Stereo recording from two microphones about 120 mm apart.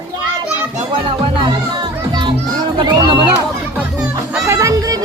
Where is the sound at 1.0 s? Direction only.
45° right (ahead or behind).